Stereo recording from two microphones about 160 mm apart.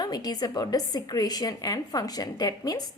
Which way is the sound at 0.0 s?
25° left (ahead or behind).